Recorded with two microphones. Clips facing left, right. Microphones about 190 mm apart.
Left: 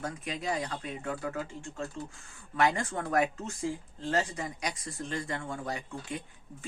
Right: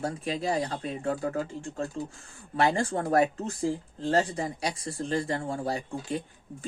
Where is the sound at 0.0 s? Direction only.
30° right (ahead or behind).